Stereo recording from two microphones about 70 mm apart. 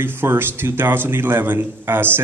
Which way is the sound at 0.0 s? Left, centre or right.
Right.